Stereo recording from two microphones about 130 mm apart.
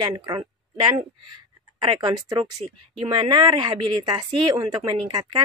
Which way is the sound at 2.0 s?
30° right (ahead or behind).